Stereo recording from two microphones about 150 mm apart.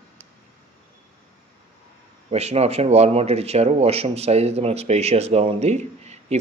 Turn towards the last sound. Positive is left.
turn(degrees=-50)  # may be behind; listen again after turning